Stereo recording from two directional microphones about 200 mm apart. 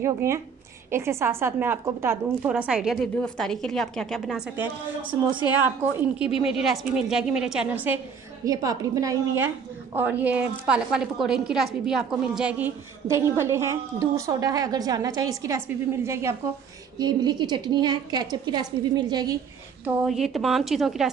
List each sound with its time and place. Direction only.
0.0 s a woman's voice: 15° right (ahead or behind); by 4.4 s 5° left (ahead or behind)
5.9 s a woman's voice: 5° right (ahead or behind)
19.8 s a woman's voice: 5° right (ahead or behind)